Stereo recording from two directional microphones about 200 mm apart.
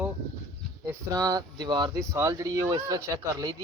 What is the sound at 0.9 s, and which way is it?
Speech, 20° right (ahead or behind).